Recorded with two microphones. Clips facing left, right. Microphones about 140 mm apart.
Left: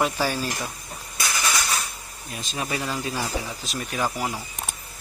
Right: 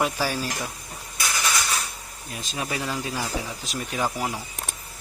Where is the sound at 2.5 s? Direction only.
Centre (ahead or behind).